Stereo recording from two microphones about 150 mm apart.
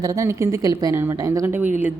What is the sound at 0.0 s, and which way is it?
A woman's voice, 20° right (ahead or behind).